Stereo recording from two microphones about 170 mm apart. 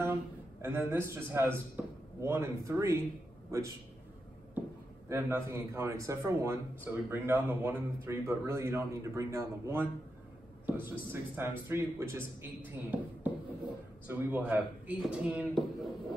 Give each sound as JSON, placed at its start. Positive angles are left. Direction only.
{"t": 0.0, "sound": "a man's voice", "side_deg": -15}
{"t": 5.0, "sound": "a man's voice", "side_deg": -15}